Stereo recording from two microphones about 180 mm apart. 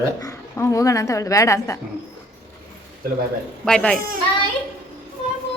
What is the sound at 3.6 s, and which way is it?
Speech, 5° left (ahead or behind).